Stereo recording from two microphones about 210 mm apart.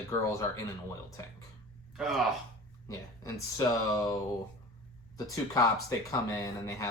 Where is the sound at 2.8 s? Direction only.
15° left (ahead or behind).